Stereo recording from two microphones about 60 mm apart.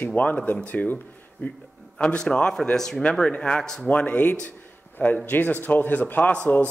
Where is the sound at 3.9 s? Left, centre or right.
Left.